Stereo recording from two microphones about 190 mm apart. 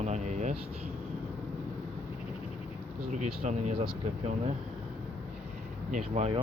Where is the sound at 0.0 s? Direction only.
35° right (ahead or behind).